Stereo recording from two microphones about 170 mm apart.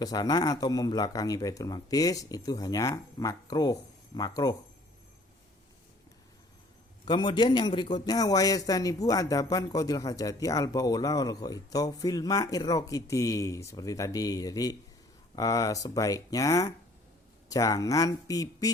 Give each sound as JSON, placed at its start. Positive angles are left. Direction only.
{"t": 0.0, "sound": "a man's voice", "side_deg": 20}
{"t": 7.0, "sound": "a man's voice", "side_deg": 25}